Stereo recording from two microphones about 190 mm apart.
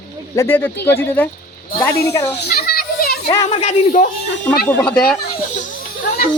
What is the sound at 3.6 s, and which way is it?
Speech, 40° left (ahead or behind).